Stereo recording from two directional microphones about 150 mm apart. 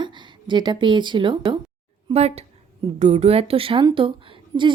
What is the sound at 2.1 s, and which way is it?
Speech, 45° right (ahead or behind).